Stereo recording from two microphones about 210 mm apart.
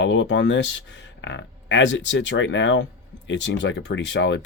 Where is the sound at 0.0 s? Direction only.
60° left (ahead or behind).